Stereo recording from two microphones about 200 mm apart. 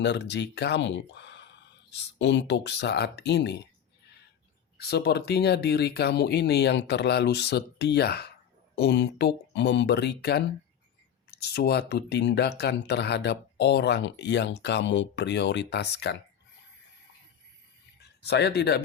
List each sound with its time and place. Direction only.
0.0 s speech: 60° left (ahead or behind)
4.8 s speech: 55° left (ahead or behind)
18.2 s speech: 55° left (ahead or behind)